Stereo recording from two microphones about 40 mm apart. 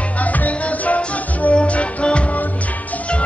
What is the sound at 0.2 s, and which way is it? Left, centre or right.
Music, left.